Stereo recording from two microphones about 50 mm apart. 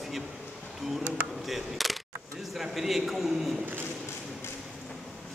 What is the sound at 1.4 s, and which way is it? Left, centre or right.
A man's voice, centre.